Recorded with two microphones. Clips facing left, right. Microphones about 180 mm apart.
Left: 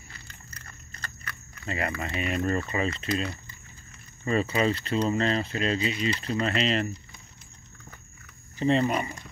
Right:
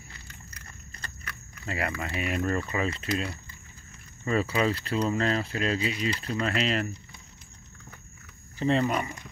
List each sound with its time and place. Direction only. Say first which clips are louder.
1.2 s speech: left 1 dB; 5° right (ahead or behind)
4.2 s speech: left 1 dB; 20° left (ahead or behind)
4.6 s speech: left 1 dB; 5° right (ahead or behind)
8.6 s speech: left 1 dB; centre (ahead or behind)